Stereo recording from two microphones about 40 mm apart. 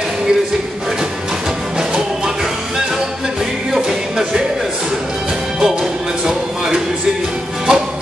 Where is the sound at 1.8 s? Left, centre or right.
Centre.